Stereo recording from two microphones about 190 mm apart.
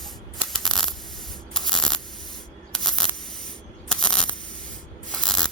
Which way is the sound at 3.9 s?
5° left (ahead or behind).